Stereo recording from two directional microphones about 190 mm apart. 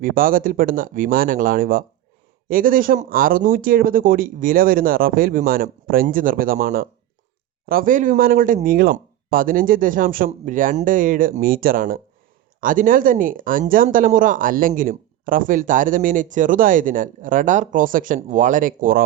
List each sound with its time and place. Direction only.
0.0 s speech: 50° right (ahead or behind)